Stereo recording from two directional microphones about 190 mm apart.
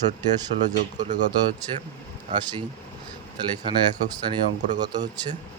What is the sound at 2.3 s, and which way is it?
Speech, 25° right (ahead or behind).